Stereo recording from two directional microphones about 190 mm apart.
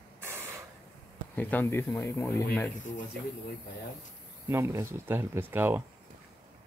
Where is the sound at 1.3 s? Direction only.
10° left (ahead or behind).